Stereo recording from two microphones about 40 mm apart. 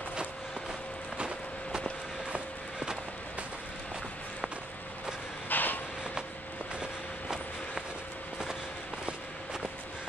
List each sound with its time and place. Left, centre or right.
1.1 s vehicle: right
5.5 s vehicle: left
6.8 s vehicle: centre
9.0 s walk: centre